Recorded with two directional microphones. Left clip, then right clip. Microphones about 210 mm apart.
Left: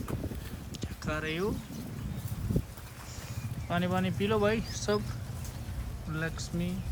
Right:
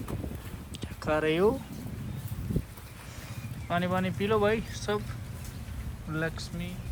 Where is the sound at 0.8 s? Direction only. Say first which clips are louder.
Right 8 dB; centre (ahead or behind).